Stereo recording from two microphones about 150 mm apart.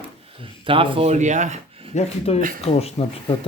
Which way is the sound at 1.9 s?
50° left (ahead or behind).